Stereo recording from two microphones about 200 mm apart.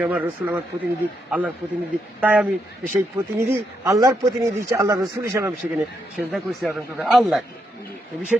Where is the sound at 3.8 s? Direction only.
15° right (ahead or behind).